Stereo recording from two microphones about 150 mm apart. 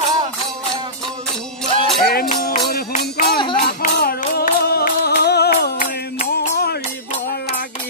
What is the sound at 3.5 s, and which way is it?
Music, 75° left (ahead or behind).